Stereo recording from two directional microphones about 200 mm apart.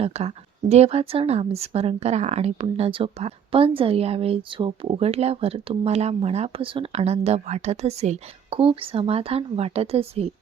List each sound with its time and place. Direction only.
0.0 s speech: 30° right (ahead or behind)